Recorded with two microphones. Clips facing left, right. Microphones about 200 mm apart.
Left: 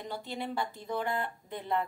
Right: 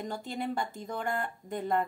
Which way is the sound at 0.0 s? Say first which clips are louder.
Right 3 dB; 45° right (ahead or behind).